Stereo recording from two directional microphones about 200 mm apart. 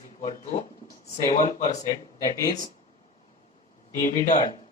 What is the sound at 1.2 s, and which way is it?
Speech, 15° left (ahead or behind).